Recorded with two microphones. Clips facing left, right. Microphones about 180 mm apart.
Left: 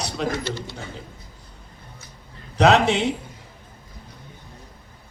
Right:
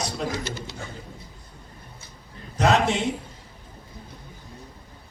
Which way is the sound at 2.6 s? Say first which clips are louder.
Left 4 dB; 75° left (ahead or behind).